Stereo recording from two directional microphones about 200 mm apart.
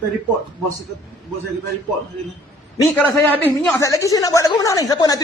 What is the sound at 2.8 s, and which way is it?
A woman's voice, 15° left (ahead or behind).